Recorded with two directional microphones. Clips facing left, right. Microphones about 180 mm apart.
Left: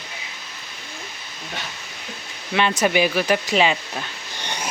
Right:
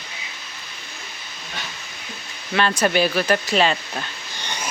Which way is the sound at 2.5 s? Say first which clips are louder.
Even; 20° left (ahead or behind).